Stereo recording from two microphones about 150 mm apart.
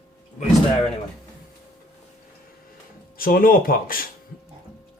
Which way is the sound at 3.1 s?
75° left (ahead or behind).